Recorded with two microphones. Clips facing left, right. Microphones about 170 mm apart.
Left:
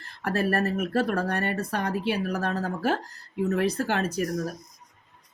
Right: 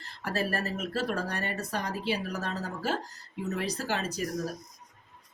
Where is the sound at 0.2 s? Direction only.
55° left (ahead or behind).